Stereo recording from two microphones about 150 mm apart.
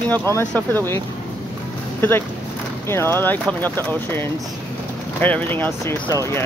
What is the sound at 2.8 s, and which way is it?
Speech, 15° left (ahead or behind).